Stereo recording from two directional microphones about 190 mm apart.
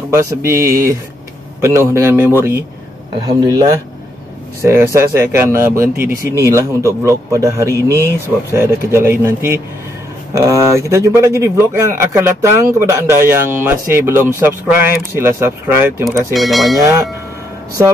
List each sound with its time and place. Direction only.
0.1 s speech: 15° right (ahead or behind)
14.7 s speech: 50° left (ahead or behind)
15.1 s speech: 15° right (ahead or behind)
16.3 s speech: centre (ahead or behind)